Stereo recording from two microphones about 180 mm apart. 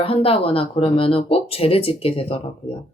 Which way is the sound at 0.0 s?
30° left (ahead or behind).